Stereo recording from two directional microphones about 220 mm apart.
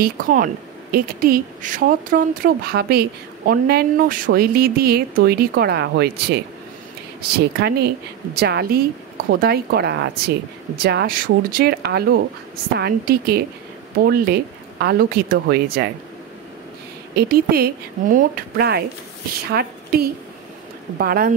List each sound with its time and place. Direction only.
0.0 s speech: 40° right (ahead or behind)
17.1 s a woman's voice: 45° right (ahead or behind)